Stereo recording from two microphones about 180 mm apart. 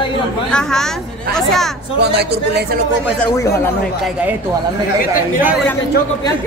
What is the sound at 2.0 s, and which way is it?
Speech, 65° right (ahead or behind).